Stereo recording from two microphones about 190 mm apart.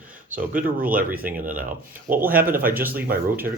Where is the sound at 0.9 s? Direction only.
50° right (ahead or behind).